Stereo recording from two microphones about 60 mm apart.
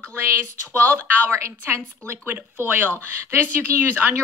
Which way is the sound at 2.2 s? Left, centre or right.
Right.